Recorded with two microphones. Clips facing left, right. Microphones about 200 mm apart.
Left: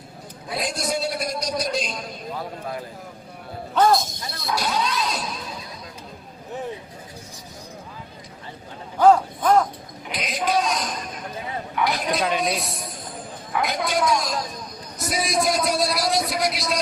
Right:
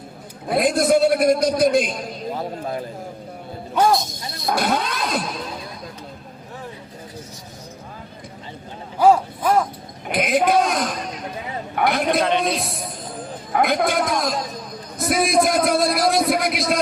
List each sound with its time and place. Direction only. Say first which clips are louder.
0.4 s a man's voice: right 10 dB; 55° right (ahead or behind)
2.4 s speech: right 4 dB; 25° right (ahead or behind)
3.8 s speech: even; 10° right (ahead or behind)
4.5 s a man's voice: right 2 dB; 55° right (ahead or behind)
9.0 s speech: even; 10° right (ahead or behind)
10.1 s a man's voice: right 7 dB; 55° right (ahead or behind)